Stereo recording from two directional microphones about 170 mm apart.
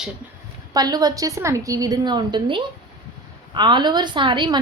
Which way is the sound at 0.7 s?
25° right (ahead or behind).